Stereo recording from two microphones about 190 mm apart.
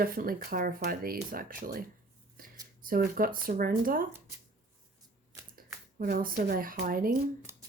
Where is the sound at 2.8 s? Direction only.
50° right (ahead or behind).